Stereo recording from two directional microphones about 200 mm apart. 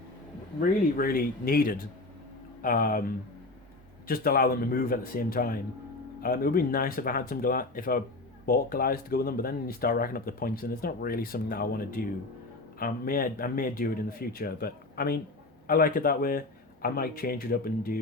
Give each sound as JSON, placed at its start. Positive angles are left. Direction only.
{"t": 0.9, "sound": "speech", "side_deg": 45}
{"t": 4.0, "sound": "speech", "side_deg": 45}